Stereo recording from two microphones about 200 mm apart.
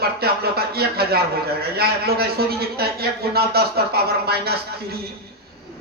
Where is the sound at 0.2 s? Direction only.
50° right (ahead or behind).